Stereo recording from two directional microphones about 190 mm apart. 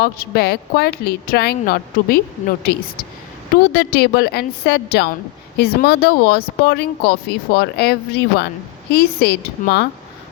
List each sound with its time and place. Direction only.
0.0 s speech: 55° left (ahead or behind)
3.5 s speech: 55° left (ahead or behind)